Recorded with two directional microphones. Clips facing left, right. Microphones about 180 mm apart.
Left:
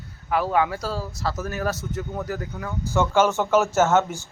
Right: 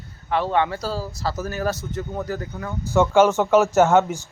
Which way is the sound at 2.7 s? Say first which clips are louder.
Right 4 dB; 15° right (ahead or behind).